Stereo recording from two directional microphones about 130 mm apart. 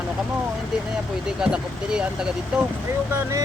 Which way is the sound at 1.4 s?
5° right (ahead or behind).